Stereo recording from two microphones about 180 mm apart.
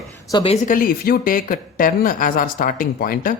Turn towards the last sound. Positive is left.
turn(degrees=50)  # may be behind; listen again after turning